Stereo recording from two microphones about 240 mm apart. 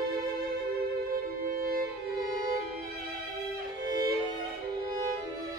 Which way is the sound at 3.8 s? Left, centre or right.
Centre.